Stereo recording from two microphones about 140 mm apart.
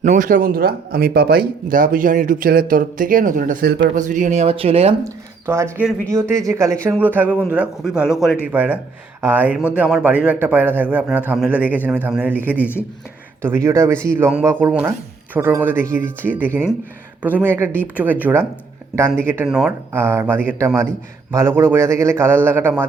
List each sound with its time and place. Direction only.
0.0 s speech: 65° right (ahead or behind); by 1.5 s 90° right
1.7 s speech: 75° right (ahead or behind)
4.4 s speech: 45° right (ahead or behind)
5.0 s speech: 20° right (ahead or behind)
12.5 s speech: 15° left (ahead or behind)
13.4 s speech: 20° right (ahead or behind)
19.5 s speech: 5° right (ahead or behind)
19.9 s speech: 15° right (ahead or behind)